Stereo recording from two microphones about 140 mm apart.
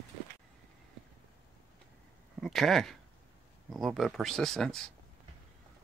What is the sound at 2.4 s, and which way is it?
Speech, centre (ahead or behind).